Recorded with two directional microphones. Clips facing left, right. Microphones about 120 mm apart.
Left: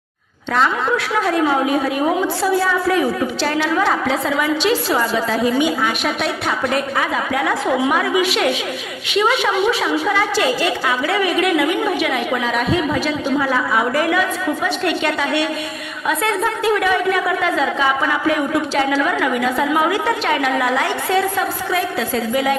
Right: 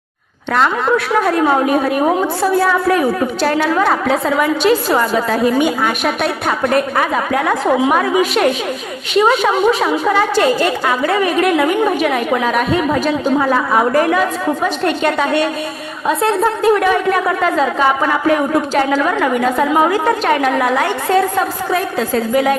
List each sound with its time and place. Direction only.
0.5 s a woman's voice: 55° right (ahead or behind)